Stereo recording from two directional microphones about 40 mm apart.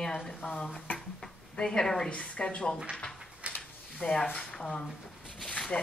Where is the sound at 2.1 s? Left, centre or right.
Left.